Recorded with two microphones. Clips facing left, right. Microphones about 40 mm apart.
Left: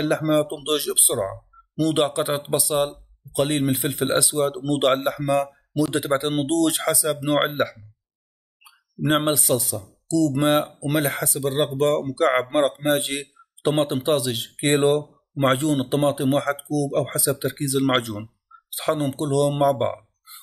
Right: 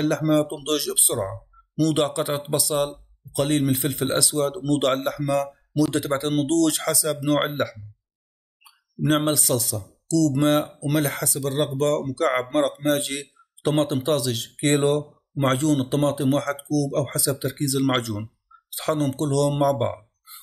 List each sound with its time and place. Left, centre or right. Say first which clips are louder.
0.0 s speech: even; centre